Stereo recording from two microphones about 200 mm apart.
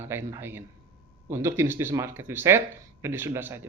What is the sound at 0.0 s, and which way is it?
Speech, 10° right (ahead or behind).